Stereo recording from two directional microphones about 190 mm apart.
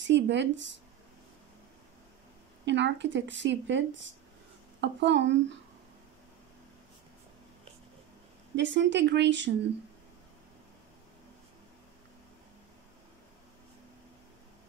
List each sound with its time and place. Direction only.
0.0 s speech: 65° right (ahead or behind)
2.6 s speech: 70° right (ahead or behind)
8.5 s speech: 70° right (ahead or behind)